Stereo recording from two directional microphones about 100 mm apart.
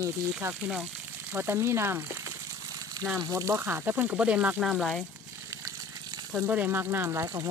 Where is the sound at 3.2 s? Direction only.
35° right (ahead or behind).